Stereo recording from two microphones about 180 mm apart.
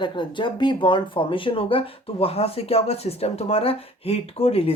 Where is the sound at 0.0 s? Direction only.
25° left (ahead or behind).